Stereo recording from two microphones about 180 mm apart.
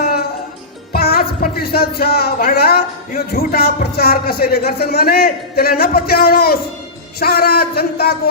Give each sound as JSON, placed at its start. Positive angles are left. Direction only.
{"t": 0.0, "sound": "music", "side_deg": 60}
{"t": 0.9, "sound": "speech", "side_deg": 60}